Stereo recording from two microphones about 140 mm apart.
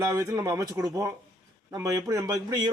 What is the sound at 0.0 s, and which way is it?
A man's voice, 20° right (ahead or behind).